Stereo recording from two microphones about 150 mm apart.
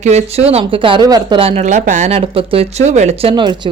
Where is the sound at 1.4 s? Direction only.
40° right (ahead or behind).